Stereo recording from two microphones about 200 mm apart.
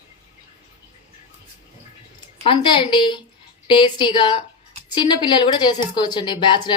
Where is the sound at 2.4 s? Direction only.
25° left (ahead or behind).